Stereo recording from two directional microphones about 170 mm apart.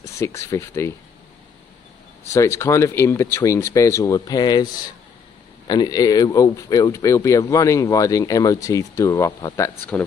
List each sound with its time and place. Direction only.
0.0 s speech: 15° left (ahead or behind)
2.2 s speech: 15° left (ahead or behind)
5.7 s speech: 25° left (ahead or behind)